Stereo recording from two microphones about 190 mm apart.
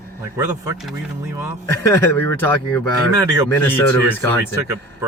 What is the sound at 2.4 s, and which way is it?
Speech, 10° left (ahead or behind).